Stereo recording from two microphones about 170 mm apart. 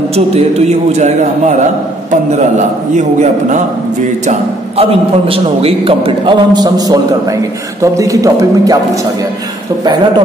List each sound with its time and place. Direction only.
0.1 s a man's voice: 40° right (ahead or behind)
3.0 s a man's voice: 45° right (ahead or behind)
4.3 s a man's voice: 35° right (ahead or behind)
9.8 s a man's voice: 25° right (ahead or behind)